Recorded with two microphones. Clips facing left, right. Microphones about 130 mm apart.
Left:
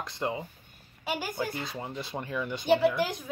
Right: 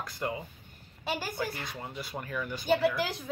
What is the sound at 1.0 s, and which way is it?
Speech, 15° left (ahead or behind).